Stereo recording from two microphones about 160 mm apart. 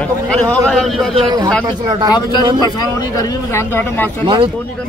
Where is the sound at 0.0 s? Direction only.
10° left (ahead or behind).